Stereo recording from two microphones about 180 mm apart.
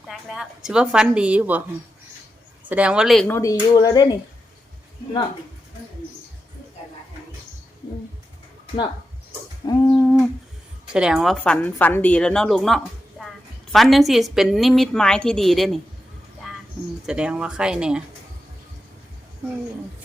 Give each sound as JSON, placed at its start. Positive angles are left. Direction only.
{"t": 0.1, "sound": "a woman's voice", "side_deg": 0}
{"t": 2.6, "sound": "a woman's voice", "side_deg": -5}
{"t": 3.2, "sound": "speech", "side_deg": 15}
{"t": 9.8, "sound": "humming", "side_deg": 10}
{"t": 10.9, "sound": "a woman's voice", "side_deg": -5}
{"t": 17.1, "sound": "a woman's voice", "side_deg": -5}